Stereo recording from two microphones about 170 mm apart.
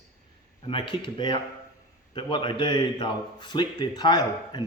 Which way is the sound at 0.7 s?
30° left (ahead or behind).